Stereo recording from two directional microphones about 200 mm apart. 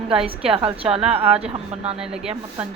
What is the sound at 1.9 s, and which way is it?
Speech, 5° right (ahead or behind).